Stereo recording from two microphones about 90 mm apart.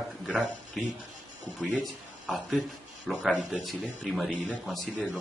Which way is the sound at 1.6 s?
5° left (ahead or behind).